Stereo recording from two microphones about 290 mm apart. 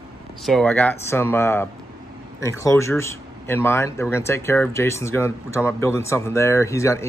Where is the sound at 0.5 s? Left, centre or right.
Centre.